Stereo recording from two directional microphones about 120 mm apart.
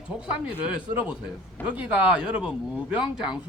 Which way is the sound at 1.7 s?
10° right (ahead or behind).